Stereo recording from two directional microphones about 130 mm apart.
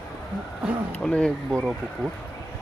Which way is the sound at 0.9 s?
10° left (ahead or behind).